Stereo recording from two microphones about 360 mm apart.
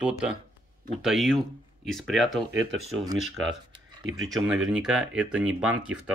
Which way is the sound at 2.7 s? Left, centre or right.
Right.